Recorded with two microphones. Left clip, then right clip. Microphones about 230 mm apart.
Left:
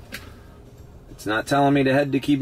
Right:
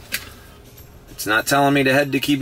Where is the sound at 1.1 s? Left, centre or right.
Centre.